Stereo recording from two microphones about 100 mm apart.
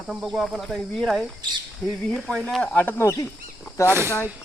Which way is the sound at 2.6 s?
15° left (ahead or behind).